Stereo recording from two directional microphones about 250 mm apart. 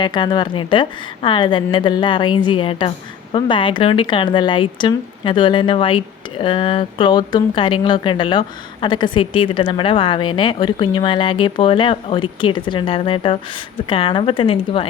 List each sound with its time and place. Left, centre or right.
0.0 s speech: centre